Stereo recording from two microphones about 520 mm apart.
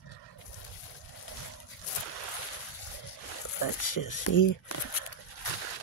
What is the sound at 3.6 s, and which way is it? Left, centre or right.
Speech, left.